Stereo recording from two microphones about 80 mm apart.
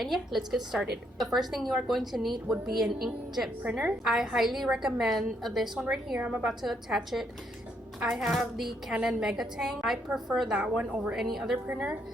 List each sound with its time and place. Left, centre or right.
0.0 s a woman's voice: centre
5.8 s a woman's voice: centre
6.4 s a woman's voice: centre
11.7 s a woman's voice: centre